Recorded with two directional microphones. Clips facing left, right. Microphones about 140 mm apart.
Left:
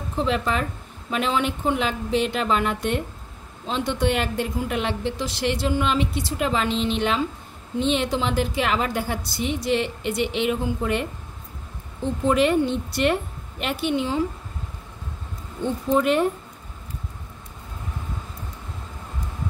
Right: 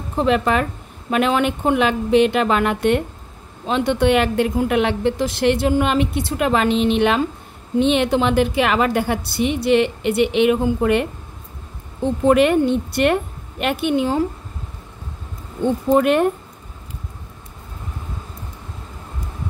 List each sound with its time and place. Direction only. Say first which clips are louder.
0.1 s speech: right 6 dB; 60° right (ahead or behind)
12.3 s speech: right 5 dB; 60° right (ahead or behind)
15.6 s speech: right 5 dB; 60° right (ahead or behind)